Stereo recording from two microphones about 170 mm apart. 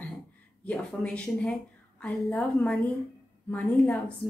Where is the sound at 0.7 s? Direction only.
5° left (ahead or behind).